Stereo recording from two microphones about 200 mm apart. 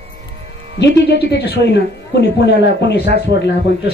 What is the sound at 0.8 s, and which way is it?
Speech, 55° left (ahead or behind).